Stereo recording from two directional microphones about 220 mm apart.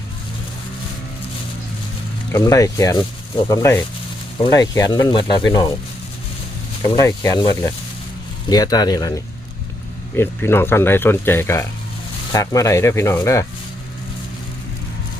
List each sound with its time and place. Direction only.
2.3 s speech: 15° left (ahead or behind)
6.8 s speech: 15° left (ahead or behind)